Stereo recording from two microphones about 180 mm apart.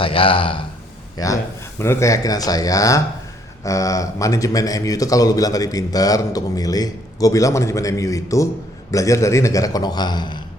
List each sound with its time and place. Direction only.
0.0 s speech: 30° left (ahead or behind)
1.1 s a man's voice: 20° left (ahead or behind)